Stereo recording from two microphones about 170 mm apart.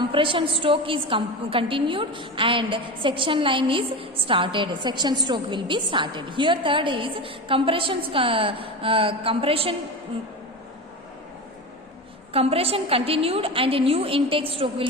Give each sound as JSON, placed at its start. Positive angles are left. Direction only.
{"t": 0.0, "sound": "a woman's voice", "side_deg": -30}
{"t": 12.3, "sound": "a woman's voice", "side_deg": -35}